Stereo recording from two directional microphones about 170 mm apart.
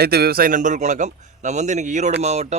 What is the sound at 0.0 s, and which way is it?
A man's voice, 65° right (ahead or behind).